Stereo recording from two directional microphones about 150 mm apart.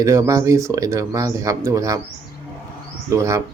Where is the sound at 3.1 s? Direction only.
20° right (ahead or behind).